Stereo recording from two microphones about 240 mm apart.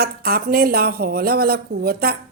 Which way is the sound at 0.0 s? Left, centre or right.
Right.